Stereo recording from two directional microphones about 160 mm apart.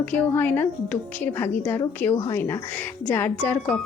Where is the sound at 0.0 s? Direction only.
10° left (ahead or behind).